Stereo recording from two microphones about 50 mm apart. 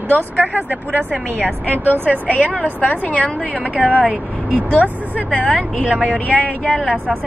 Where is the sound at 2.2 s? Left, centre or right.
Left.